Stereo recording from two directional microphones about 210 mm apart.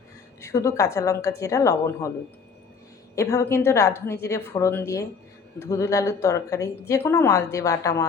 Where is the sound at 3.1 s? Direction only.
15° left (ahead or behind).